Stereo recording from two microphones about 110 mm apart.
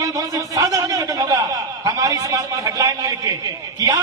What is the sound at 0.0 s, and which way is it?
Chuckle, 30° right (ahead or behind).